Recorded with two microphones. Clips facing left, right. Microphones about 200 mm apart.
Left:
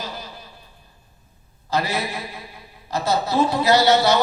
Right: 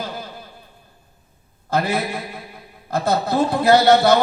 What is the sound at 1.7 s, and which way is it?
A man's voice, 55° right (ahead or behind).